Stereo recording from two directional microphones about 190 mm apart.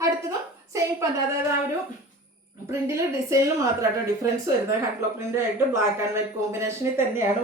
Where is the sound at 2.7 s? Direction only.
15° right (ahead or behind).